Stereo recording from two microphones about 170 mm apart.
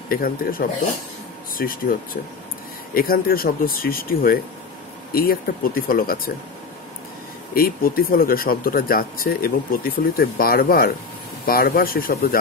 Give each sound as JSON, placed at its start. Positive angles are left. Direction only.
{"t": 0.1, "sound": "speech", "side_deg": 60}
{"t": 7.5, "sound": "speech", "side_deg": 60}